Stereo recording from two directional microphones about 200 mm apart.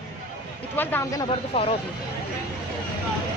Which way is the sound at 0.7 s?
10° left (ahead or behind).